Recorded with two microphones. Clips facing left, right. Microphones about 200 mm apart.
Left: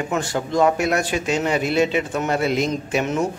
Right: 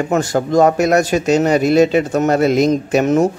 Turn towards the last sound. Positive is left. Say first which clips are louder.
# right 8 dB
turn(degrees=-45)  # may be behind; listen again after turning